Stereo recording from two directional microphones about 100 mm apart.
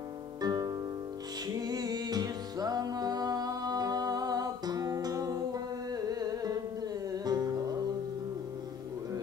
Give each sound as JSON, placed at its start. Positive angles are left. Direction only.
{"t": 0.4, "sound": "music", "side_deg": -40}